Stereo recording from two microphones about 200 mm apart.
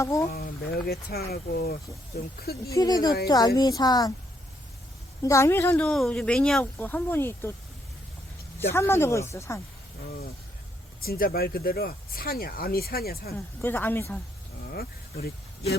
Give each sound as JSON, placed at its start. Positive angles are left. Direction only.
{"t": 0.0, "sound": "speech", "side_deg": 15}
{"t": 0.3, "sound": "speech", "side_deg": 50}
{"t": 2.6, "sound": "a woman's voice", "side_deg": 20}
{"t": 5.2, "sound": "speech", "side_deg": 15}
{"t": 8.7, "sound": "speech", "side_deg": 15}
{"t": 11.0, "sound": "speech", "side_deg": 50}
{"t": 13.3, "sound": "speech", "side_deg": 10}
{"t": 14.7, "sound": "a sound", "side_deg": 50}